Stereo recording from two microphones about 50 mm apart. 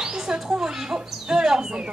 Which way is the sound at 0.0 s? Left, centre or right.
Centre.